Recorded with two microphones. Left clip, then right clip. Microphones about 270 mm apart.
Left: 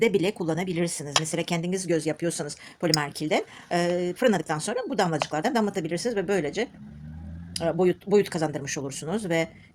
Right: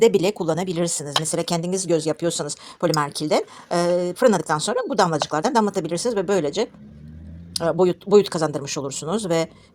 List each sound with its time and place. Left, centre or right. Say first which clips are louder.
0.0 s a woman's voice: right 6 dB; right